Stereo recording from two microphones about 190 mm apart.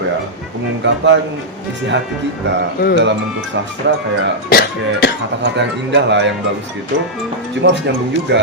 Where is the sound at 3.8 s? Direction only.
70° right (ahead or behind).